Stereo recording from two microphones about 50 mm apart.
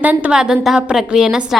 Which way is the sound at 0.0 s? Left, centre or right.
Right.